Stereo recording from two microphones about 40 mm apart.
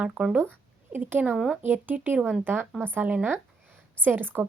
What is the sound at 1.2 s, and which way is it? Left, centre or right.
Speech, right.